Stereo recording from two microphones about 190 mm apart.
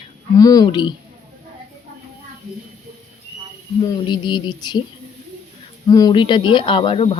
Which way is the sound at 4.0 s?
25° left (ahead or behind).